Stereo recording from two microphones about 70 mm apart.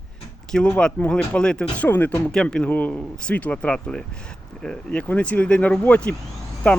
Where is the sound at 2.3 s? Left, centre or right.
Centre.